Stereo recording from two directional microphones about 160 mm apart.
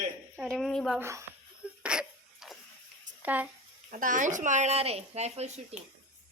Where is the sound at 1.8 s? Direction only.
5° right (ahead or behind).